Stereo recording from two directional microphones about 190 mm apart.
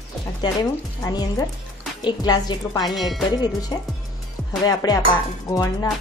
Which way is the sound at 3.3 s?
20° left (ahead or behind).